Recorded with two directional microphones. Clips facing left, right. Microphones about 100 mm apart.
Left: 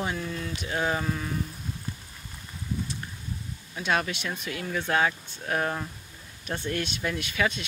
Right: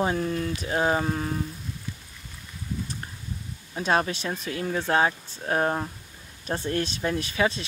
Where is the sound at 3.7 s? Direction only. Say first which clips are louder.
Right 3 dB; 35° right (ahead or behind).